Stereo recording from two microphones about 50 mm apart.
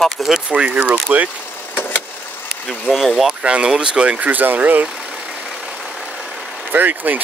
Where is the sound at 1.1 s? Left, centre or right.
Right.